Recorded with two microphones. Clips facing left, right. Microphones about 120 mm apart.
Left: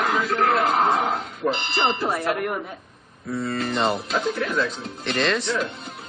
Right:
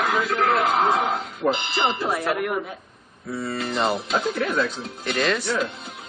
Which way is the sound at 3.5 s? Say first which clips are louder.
Even; 5° right (ahead or behind).